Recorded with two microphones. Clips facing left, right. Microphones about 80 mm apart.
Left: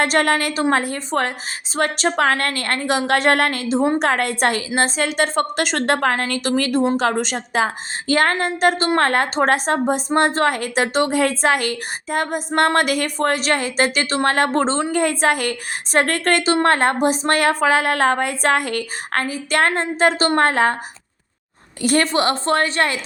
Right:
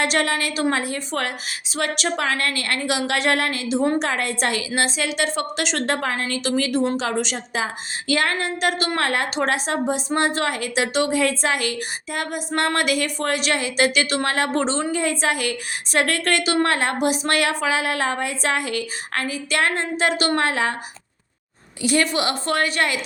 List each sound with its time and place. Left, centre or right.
0.0 s a woman's voice: left
14.3 s a woman's voice: left
21.8 s a woman's voice: left